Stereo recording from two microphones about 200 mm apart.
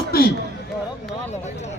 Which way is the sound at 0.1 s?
50° left (ahead or behind).